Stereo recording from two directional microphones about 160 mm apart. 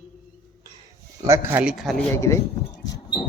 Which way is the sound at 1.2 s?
20° right (ahead or behind).